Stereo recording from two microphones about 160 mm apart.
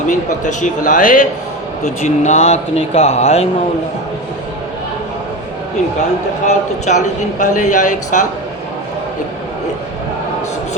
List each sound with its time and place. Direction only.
0.1 s speech: 50° left (ahead or behind)
6.5 s speech: 45° left (ahead or behind)